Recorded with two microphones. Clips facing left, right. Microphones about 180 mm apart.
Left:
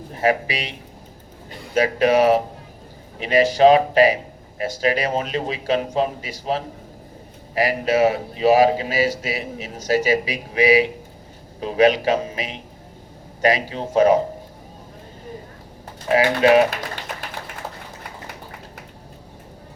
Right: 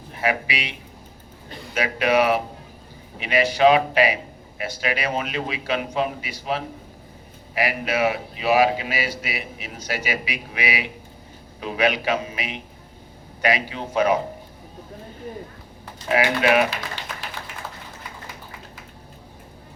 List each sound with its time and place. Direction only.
0.1 s a man's voice: 40° left (ahead or behind)
16.0 s a man's voice: 35° left (ahead or behind)
16.6 s tap: 50° left (ahead or behind)